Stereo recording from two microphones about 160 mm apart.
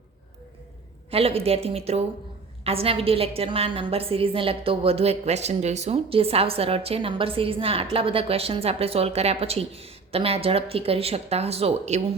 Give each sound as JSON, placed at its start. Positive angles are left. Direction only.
{"t": 1.1, "sound": "a woman's voice", "side_deg": -35}